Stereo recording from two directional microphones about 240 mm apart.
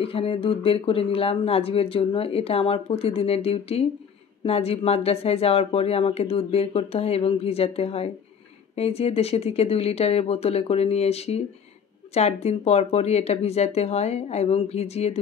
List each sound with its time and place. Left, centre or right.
0.0 s speech: left